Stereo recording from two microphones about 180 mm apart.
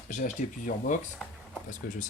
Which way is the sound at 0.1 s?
45° left (ahead or behind).